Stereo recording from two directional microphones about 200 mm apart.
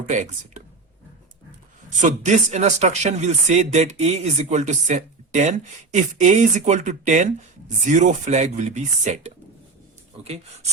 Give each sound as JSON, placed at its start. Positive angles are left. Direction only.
{"t": 0.1, "sound": "speech", "side_deg": -35}
{"t": 2.0, "sound": "speech", "side_deg": -35}